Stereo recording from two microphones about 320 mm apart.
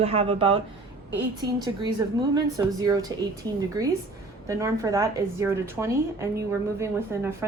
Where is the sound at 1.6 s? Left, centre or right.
Centre.